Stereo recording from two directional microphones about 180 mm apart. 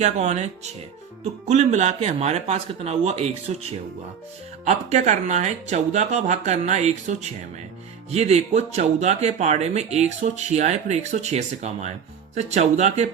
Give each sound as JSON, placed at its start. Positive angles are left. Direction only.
{"t": 0.0, "sound": "speech", "side_deg": -40}